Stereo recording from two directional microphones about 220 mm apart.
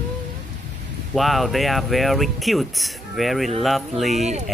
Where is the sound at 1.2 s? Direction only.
Centre (ahead or behind).